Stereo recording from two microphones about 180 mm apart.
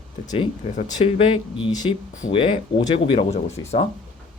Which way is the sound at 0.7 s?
30° left (ahead or behind).